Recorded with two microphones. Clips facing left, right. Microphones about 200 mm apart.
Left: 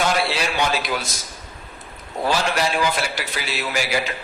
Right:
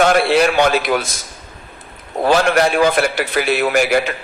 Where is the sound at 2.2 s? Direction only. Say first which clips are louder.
Right 8 dB; 55° right (ahead or behind).